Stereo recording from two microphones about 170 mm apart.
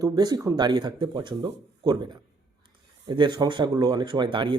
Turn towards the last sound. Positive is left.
turn(degrees=-25)  # may be behind; listen again after turning